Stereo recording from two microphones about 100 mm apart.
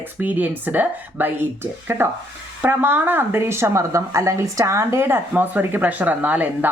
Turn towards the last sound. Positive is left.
turn(degrees=-15)  # may be behind; listen again after turning